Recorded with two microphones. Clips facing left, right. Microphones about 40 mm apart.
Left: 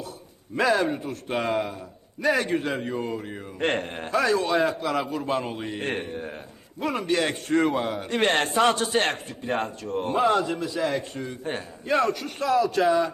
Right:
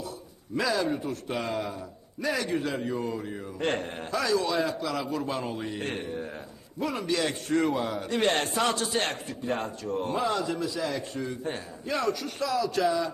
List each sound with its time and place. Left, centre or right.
0.5 s a man's voice: left